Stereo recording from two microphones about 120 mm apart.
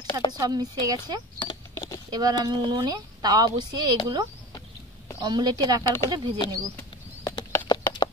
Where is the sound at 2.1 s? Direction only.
35° right (ahead or behind).